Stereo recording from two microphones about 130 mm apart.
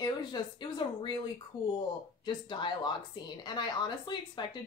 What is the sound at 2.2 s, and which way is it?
Speech, 35° left (ahead or behind).